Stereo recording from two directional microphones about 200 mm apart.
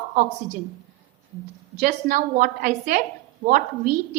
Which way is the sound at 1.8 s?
50° right (ahead or behind).